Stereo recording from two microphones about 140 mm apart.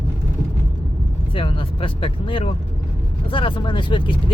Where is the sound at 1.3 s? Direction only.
40° left (ahead or behind).